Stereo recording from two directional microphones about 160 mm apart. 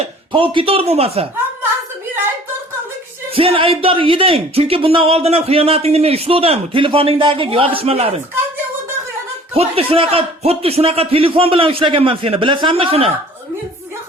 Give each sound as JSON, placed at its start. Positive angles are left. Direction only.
{"t": 0.0, "sound": "speech", "side_deg": -35}
{"t": 3.3, "sound": "speech", "side_deg": -35}
{"t": 9.6, "sound": "speech", "side_deg": -35}